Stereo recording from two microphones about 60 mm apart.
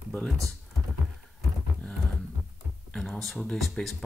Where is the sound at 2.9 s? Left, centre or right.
Centre.